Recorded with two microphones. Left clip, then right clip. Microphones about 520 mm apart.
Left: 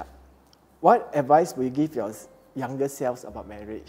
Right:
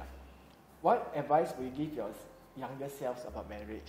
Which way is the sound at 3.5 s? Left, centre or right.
Left.